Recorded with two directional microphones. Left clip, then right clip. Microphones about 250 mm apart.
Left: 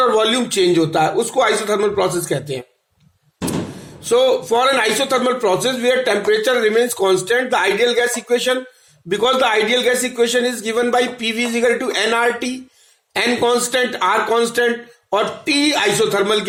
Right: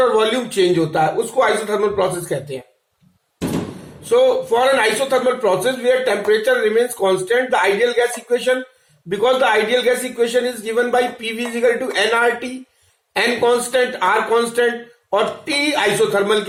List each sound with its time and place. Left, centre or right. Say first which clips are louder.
0.0 s a man's voice: even; left
4.1 s a man's voice: even; left